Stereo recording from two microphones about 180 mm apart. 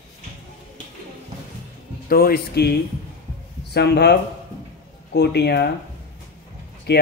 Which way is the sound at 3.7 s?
65° left (ahead or behind).